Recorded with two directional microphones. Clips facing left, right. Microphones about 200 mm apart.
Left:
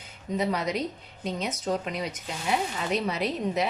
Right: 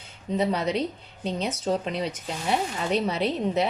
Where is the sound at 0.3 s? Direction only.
30° right (ahead or behind).